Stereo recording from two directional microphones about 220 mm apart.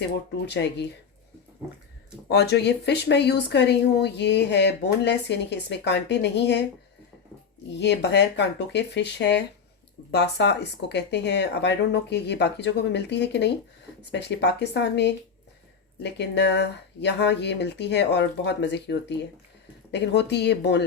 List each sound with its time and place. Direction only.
0.5 s speech: 50° left (ahead or behind)
2.3 s speech: 50° left (ahead or behind)
7.7 s speech: 50° left (ahead or behind)